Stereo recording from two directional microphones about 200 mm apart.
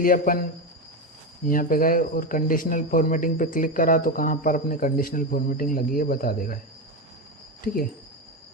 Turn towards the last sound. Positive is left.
turn(degrees=45)  # may be behind; listen again after turning